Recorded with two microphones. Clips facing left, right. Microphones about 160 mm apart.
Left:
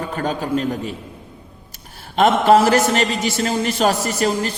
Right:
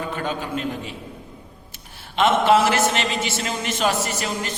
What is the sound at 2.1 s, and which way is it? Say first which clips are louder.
A man's voice: left 4 dB; 40° left (ahead or behind).